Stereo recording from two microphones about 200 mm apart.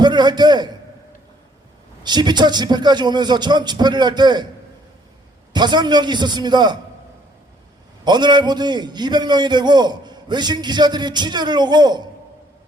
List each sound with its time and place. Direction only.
0.0 s a man's voice: 20° right (ahead or behind)
2.0 s a man's voice: 20° right (ahead or behind)
5.5 s a man's voice: 20° right (ahead or behind)
8.0 s a man's voice: 20° right (ahead or behind)